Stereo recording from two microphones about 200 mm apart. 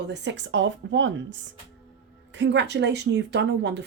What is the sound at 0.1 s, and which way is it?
Speech, 65° right (ahead or behind).